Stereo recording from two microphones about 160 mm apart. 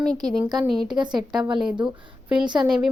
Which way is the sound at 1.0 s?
30° right (ahead or behind).